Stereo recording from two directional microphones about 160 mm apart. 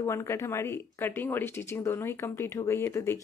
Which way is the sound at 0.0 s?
15° left (ahead or behind).